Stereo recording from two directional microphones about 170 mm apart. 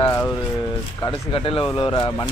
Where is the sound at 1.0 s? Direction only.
30° left (ahead or behind).